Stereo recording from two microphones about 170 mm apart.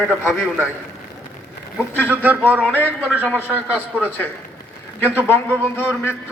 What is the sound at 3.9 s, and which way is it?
Music, 10° left (ahead or behind).